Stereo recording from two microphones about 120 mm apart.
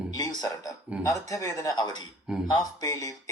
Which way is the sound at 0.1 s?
30° left (ahead or behind).